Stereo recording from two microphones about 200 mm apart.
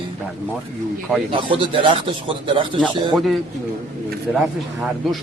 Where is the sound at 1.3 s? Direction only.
25° right (ahead or behind).